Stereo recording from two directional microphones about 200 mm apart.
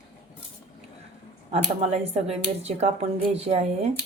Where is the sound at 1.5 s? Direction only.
30° right (ahead or behind).